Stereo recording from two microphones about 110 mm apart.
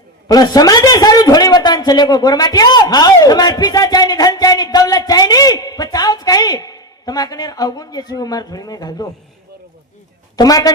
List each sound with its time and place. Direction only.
0.3 s a man's voice: 35° left (ahead or behind)
10.3 s a man's voice: 35° left (ahead or behind)